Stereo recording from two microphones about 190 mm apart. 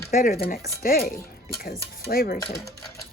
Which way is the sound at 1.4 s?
50° left (ahead or behind).